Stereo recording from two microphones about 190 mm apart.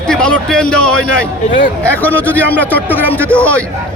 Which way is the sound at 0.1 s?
5° left (ahead or behind).